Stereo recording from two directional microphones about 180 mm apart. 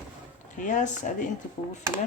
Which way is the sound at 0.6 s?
45° left (ahead or behind).